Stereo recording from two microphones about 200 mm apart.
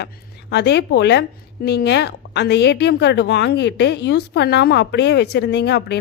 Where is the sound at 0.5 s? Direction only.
60° left (ahead or behind).